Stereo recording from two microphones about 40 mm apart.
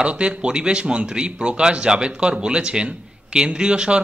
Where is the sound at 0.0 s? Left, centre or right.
Right.